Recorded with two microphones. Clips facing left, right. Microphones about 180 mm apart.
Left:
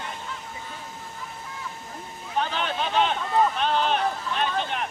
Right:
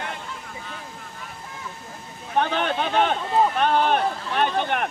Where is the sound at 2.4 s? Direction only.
60° right (ahead or behind).